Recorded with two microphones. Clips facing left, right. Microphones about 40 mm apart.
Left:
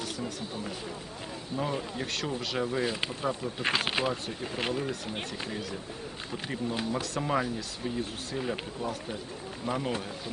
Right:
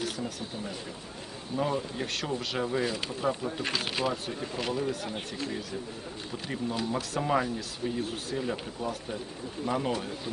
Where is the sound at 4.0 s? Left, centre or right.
Left.